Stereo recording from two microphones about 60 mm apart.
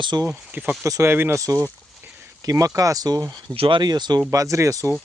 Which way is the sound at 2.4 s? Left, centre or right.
Right.